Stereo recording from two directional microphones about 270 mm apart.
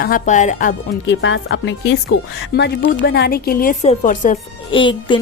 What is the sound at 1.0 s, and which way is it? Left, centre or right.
Speech, left.